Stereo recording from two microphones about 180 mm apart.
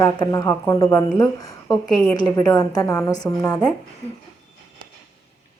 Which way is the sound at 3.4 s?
5° left (ahead or behind).